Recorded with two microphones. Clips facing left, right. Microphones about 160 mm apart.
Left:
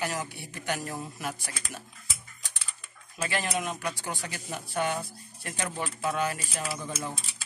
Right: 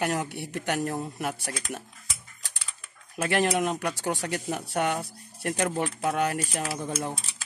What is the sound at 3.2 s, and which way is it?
Speech, 65° right (ahead or behind).